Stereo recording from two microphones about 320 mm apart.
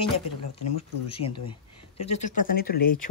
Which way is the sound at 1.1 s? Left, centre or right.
Centre.